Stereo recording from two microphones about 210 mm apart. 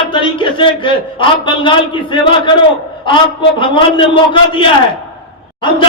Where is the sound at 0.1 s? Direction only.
25° left (ahead or behind).